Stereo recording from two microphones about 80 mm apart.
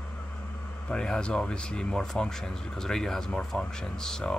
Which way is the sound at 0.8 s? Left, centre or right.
Centre.